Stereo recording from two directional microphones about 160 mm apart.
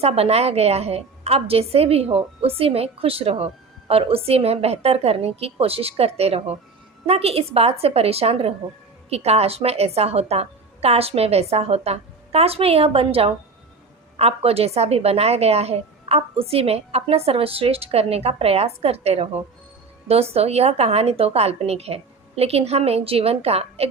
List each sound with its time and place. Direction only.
0.0 s a woman's voice: 40° right (ahead or behind)